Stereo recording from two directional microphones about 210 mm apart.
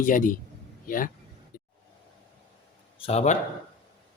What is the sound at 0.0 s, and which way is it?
A man's voice, 40° left (ahead or behind).